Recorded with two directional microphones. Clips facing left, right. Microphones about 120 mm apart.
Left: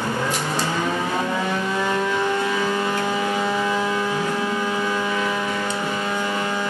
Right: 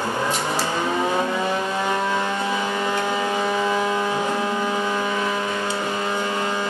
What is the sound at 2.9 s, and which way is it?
Vehicle, 20° right (ahead or behind).